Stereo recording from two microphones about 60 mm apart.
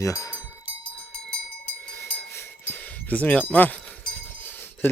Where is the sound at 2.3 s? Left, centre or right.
Left.